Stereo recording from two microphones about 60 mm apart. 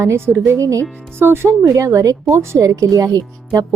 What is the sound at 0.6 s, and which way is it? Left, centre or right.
Speech, right.